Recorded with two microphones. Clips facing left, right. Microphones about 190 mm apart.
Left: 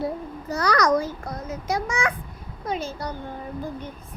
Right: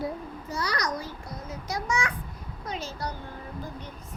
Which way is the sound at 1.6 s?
55° left (ahead or behind).